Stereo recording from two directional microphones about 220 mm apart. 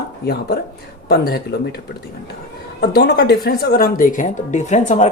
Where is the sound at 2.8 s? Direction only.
45° left (ahead or behind).